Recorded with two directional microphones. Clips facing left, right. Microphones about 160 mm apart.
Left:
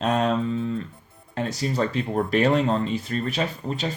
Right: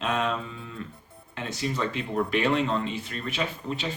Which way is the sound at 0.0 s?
40° left (ahead or behind).